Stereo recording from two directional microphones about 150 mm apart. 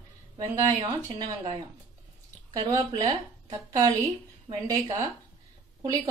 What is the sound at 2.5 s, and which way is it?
A woman's voice, 25° right (ahead or behind).